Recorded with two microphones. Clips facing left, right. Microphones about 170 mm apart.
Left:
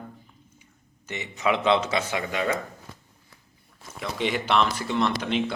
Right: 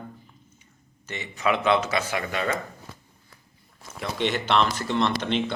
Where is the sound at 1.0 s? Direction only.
20° left (ahead or behind).